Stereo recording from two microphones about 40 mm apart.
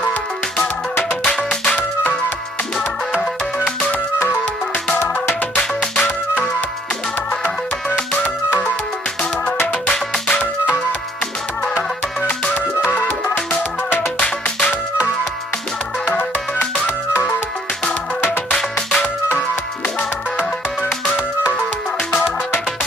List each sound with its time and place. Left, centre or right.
1.2 s music: left
5.6 s music: left
18.5 s music: left